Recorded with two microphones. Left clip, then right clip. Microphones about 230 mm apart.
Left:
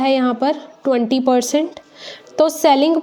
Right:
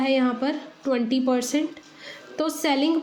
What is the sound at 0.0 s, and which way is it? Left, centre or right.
Speech, left.